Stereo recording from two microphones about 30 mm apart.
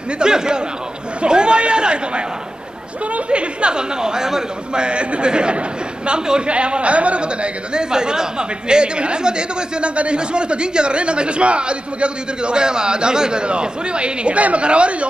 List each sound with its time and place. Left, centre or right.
0.2 s a man's voice: right
3.3 s speech: right
4.0 s a man's voice: right
4.8 s a man's voice: right
6.5 s speech: right
7.9 s a woman's voice: right